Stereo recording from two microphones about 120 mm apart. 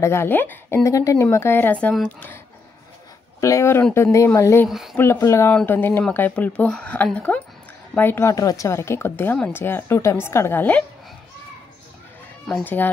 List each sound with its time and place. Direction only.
0.0 s a woman's voice: 20° left (ahead or behind)
3.3 s a woman's voice: 25° left (ahead or behind)
4.6 s speech: centre (ahead or behind)
4.9 s a woman's voice: 15° left (ahead or behind)
5.5 s a woman's voice: 15° left (ahead or behind)
12.6 s speech: 15° left (ahead or behind)